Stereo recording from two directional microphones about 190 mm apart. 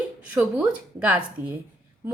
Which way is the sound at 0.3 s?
10° right (ahead or behind).